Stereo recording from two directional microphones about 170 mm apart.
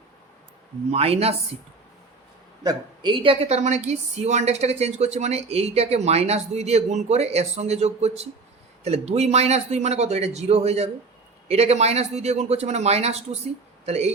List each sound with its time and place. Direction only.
0.9 s a woman's voice: 35° right (ahead or behind)
2.6 s a woman's voice: 30° right (ahead or behind)